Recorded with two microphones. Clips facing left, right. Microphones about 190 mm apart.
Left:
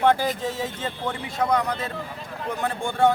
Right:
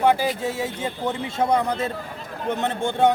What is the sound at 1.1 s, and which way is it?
Speech, 25° right (ahead or behind).